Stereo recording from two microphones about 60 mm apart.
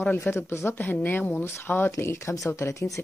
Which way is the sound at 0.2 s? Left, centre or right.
Left.